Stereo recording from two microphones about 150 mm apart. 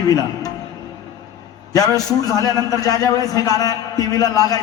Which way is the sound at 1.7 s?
25° left (ahead or behind).